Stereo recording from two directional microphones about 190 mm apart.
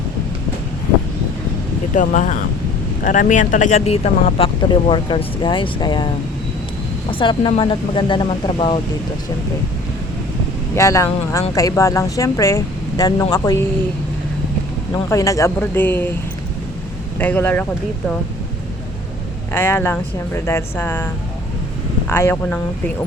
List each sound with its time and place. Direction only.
2.0 s speech: 40° left (ahead or behind); by 6.1 s 25° left (ahead or behind)
7.1 s speech: 25° left (ahead or behind)
10.8 s speech: 15° left (ahead or behind)
14.9 s speech: 15° left (ahead or behind)
17.2 s speech: 10° left (ahead or behind)
19.5 s speech: 10° left (ahead or behind)
22.1 s speech: 10° left (ahead or behind)